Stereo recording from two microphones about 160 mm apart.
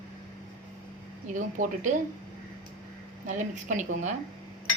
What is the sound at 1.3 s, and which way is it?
Speech, 55° right (ahead or behind).